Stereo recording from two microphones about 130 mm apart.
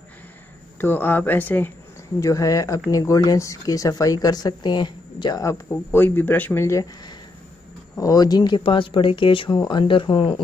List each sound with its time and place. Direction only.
0.7 s speech: 15° left (ahead or behind)
2.1 s speech: 25° left (ahead or behind)
7.9 s speech: 25° left (ahead or behind)